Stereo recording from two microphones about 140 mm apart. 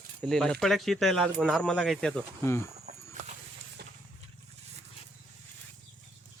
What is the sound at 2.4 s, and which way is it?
Speech, 20° left (ahead or behind).